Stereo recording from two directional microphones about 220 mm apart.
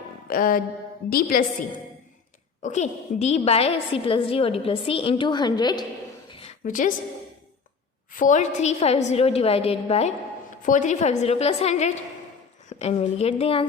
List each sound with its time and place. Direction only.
0.3 s a woman's voice: 40° left (ahead or behind)
2.6 s a woman's voice: 35° left (ahead or behind)
6.7 s a woman's voice: 35° left (ahead or behind)
8.1 s a woman's voice: 35° left (ahead or behind)